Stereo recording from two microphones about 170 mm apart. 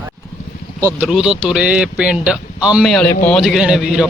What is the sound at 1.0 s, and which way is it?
Speech, 5° right (ahead or behind).